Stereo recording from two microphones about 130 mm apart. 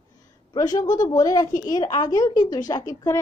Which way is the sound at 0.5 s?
30° left (ahead or behind).